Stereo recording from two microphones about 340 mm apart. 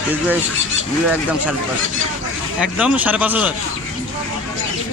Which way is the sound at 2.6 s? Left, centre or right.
Centre.